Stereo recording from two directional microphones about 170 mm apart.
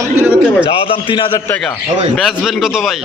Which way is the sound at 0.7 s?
35° left (ahead or behind).